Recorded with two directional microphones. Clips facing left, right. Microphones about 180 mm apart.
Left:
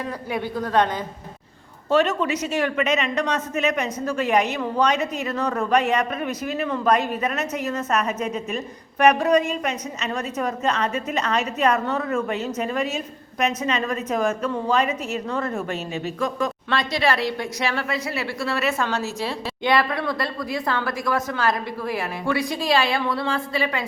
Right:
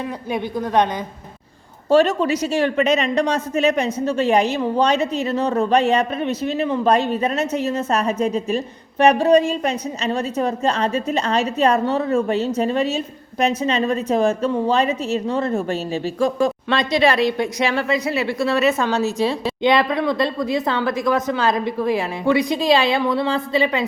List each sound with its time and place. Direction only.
0.3 s a woman's voice: 20° right (ahead or behind)
1.9 s a woman's voice: 35° right (ahead or behind)